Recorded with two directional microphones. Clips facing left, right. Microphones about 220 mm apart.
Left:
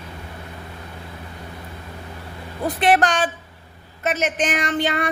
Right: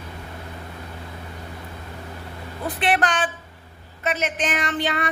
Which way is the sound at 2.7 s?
45° left (ahead or behind).